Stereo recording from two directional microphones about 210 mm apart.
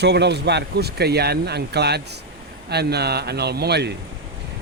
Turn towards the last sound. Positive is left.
turn(degrees=-50)  # may be behind; listen again after turning